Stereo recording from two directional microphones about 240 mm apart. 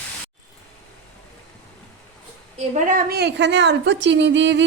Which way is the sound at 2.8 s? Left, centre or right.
Right.